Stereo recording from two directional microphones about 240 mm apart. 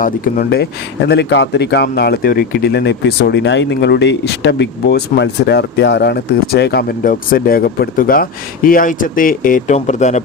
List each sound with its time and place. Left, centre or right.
0.0 s speech: left